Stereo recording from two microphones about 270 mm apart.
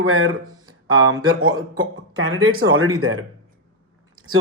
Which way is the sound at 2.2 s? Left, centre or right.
Right.